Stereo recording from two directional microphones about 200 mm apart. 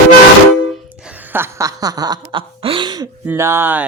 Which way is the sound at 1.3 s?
15° right (ahead or behind).